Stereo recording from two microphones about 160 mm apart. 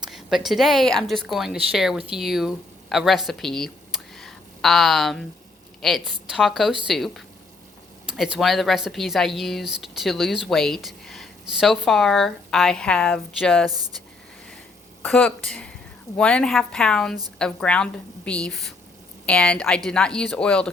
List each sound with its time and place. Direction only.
0.0 s speech: centre (ahead or behind)
4.1 s a sound: centre (ahead or behind)
5.8 s speech: centre (ahead or behind)
13.7 s speech: 25° right (ahead or behind)
15.0 s speech: 10° left (ahead or behind)